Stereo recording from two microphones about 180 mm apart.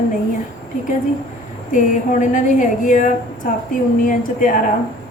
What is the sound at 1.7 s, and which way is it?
A woman's voice, 45° left (ahead or behind).